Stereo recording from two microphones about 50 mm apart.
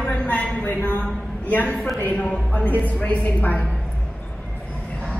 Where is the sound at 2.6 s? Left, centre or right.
Left.